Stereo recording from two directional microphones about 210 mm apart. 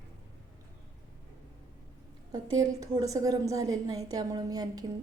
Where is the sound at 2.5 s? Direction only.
15° right (ahead or behind).